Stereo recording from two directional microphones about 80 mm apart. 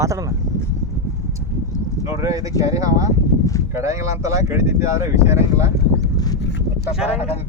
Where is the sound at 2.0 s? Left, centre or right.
Right.